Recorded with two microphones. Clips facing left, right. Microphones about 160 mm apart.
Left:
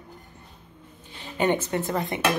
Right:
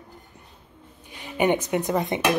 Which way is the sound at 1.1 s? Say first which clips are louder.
Right 2 dB; 15° right (ahead or behind).